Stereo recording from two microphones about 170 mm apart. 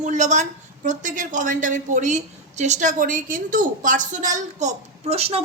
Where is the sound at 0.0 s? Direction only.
45° right (ahead or behind).